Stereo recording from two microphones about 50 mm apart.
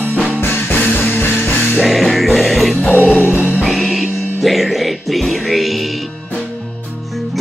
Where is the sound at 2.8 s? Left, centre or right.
Left.